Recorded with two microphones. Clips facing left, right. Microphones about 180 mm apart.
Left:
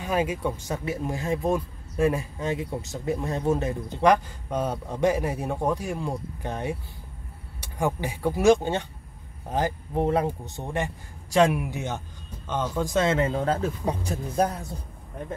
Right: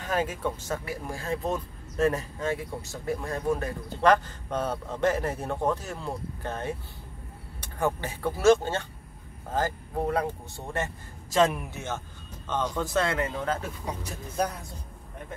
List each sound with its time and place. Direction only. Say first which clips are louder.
0.0 s speech: left 3 dB; 10° left (ahead or behind)
13.3 s speech: left 5 dB; 35° left (ahead or behind)